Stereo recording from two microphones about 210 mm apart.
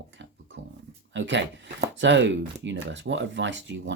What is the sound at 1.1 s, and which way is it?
Speech, 60° right (ahead or behind).